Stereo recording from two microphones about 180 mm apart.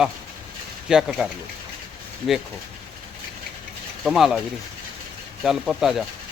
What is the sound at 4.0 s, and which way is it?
Speech, centre (ahead or behind).